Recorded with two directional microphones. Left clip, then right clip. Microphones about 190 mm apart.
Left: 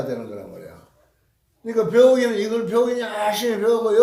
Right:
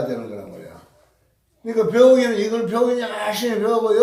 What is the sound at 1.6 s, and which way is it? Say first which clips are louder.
Speech: right 1 dB; 25° left (ahead or behind).